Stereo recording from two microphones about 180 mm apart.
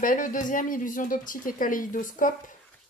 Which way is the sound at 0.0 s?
50° left (ahead or behind).